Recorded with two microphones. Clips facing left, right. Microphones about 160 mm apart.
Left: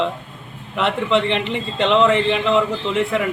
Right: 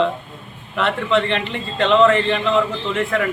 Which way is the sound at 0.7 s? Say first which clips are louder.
Even; 20° left (ahead or behind).